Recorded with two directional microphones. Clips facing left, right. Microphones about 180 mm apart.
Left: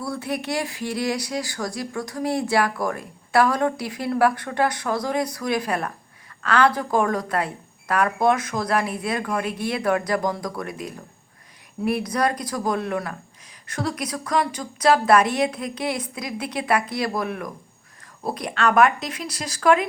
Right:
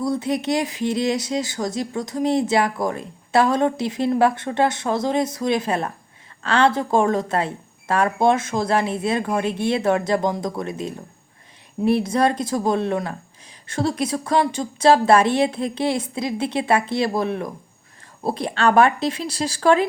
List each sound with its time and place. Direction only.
0.0 s speech: 20° right (ahead or behind)